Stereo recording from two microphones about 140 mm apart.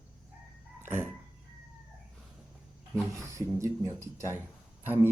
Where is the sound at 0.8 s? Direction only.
15° right (ahead or behind).